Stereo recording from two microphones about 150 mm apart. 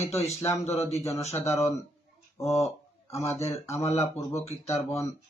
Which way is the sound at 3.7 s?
45° left (ahead or behind).